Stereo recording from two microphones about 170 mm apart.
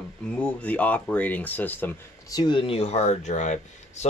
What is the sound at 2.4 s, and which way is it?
Speech, 30° left (ahead or behind).